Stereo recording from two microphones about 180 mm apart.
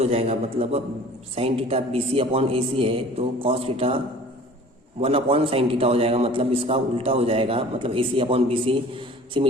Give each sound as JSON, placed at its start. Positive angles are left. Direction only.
{"t": 0.0, "sound": "a man's voice", "side_deg": -35}